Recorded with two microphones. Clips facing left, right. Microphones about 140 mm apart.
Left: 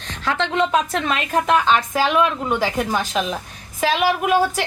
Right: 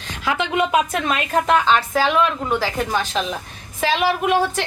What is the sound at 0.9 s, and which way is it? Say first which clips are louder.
A woman's voice: even; 5° right (ahead or behind).